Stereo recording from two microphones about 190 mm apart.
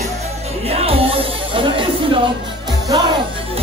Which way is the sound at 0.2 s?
35° right (ahead or behind).